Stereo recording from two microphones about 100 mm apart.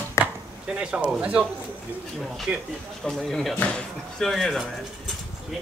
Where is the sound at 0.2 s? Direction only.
30° left (ahead or behind).